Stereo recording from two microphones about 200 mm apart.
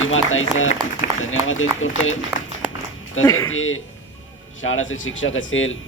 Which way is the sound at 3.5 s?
80° left.